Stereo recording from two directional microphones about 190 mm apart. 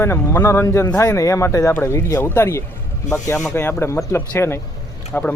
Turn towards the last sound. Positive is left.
turn(degrees=10)  # may be behind; listen again after turning